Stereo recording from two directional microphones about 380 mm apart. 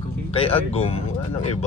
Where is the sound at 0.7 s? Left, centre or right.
Centre.